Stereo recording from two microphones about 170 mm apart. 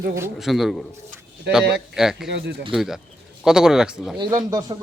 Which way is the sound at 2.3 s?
75° right (ahead or behind).